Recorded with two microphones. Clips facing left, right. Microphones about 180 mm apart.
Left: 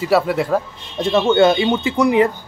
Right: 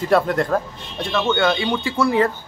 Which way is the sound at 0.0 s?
5° left (ahead or behind).